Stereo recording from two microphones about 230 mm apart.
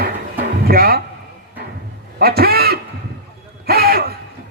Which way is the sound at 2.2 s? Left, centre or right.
Right.